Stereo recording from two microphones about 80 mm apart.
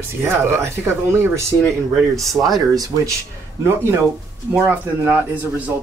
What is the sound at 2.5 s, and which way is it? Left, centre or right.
Speech, right.